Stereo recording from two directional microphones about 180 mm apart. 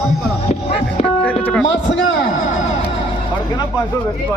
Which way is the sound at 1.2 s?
5° left (ahead or behind).